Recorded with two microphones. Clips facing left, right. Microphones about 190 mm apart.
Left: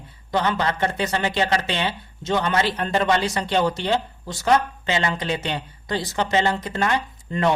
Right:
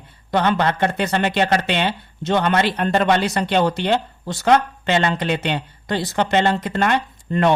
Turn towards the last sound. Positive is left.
turn(degrees=-60)  # may be behind; listen again after turning